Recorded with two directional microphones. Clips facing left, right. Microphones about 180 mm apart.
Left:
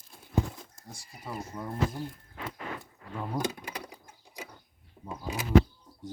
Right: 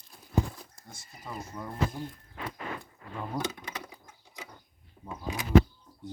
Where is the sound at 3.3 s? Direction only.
10° left (ahead or behind).